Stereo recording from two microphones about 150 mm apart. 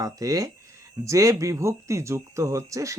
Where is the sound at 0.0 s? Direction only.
20° right (ahead or behind).